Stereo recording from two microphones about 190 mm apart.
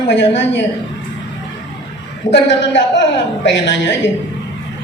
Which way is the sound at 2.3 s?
70° left (ahead or behind).